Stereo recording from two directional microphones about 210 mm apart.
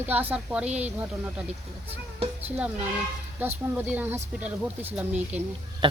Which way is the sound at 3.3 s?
10° right (ahead or behind).